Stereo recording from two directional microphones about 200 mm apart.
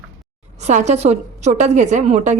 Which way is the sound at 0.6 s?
35° right (ahead or behind).